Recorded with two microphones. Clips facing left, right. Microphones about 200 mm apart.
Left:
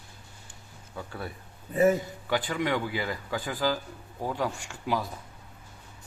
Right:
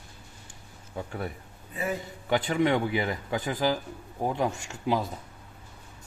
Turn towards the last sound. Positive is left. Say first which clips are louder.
# right 3 dB
turn(degrees=-25)  # may be behind; listen again after turning